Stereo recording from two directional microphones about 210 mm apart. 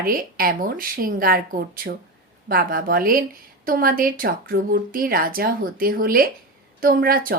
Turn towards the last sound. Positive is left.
turn(degrees=-45)  # may be behind; listen again after turning